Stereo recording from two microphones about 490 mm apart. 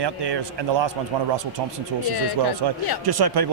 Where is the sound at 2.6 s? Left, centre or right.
Right.